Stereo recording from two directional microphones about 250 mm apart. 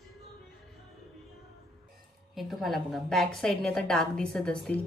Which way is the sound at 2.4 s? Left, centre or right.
Centre.